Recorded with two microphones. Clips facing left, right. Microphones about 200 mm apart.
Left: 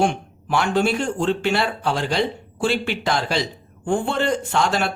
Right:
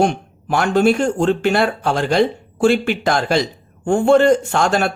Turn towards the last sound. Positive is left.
turn(degrees=-50)  # may be behind; listen again after turning